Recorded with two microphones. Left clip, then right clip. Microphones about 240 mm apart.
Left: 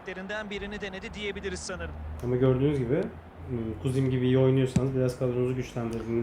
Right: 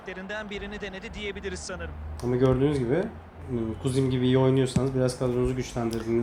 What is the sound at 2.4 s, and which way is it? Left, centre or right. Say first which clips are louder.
Speech: right 2 dB; right.